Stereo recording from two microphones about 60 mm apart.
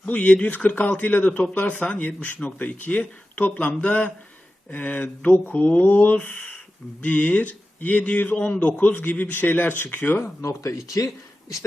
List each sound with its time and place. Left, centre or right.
0.0 s speech: left
10.4 s speech: left